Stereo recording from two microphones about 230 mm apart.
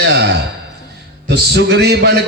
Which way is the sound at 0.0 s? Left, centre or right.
Right.